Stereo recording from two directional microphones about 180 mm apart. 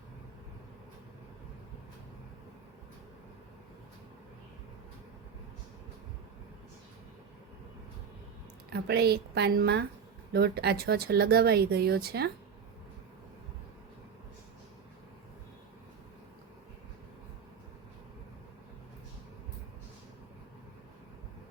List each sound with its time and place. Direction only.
8.7 s speech: 65° right (ahead or behind)